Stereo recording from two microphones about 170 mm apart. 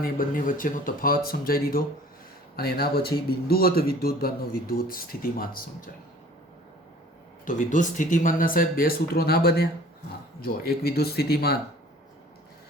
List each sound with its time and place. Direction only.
0.0 s speech: 55° left (ahead or behind)
7.4 s speech: 50° left (ahead or behind); by 11.5 s 65° left (ahead or behind)